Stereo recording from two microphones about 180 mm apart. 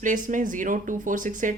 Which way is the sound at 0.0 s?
45° right (ahead or behind).